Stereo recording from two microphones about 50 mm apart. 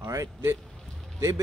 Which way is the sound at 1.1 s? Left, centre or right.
Right.